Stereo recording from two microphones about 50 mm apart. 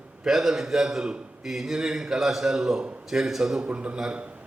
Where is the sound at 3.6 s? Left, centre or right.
Right.